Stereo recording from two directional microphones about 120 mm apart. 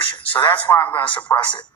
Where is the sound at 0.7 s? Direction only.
25° left (ahead or behind).